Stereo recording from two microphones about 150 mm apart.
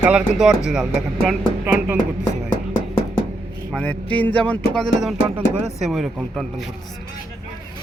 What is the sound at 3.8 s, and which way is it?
Speech, 10° left (ahead or behind).